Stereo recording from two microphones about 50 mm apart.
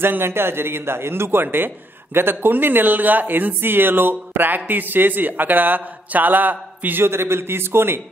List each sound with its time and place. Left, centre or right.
0.0 s a man's voice: right
7.0 s a man's voice: right